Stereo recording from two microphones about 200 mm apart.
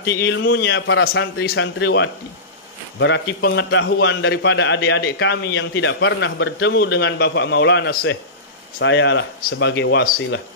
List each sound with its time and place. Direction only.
0.2 s a man's voice: 65° left (ahead or behind)